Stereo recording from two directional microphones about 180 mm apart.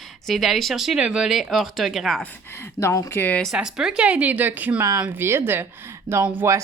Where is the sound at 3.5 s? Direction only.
5° right (ahead or behind).